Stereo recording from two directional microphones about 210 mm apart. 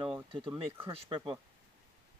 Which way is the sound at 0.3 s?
25° right (ahead or behind).